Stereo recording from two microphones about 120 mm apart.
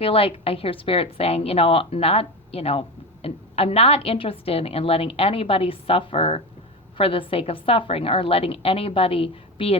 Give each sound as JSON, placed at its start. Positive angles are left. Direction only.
{"t": 0.0, "sound": "a woman's voice", "side_deg": 50}